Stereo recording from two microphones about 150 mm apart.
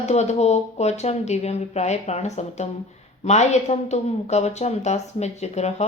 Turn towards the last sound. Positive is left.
turn(degrees=45)  # may be behind; listen again after turning